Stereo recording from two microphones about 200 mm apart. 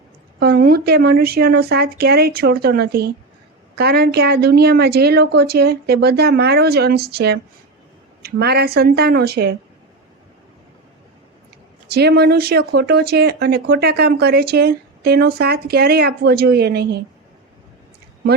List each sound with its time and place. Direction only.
0.3 s speech: 50° right (ahead or behind)
11.9 s speech: 55° right (ahead or behind)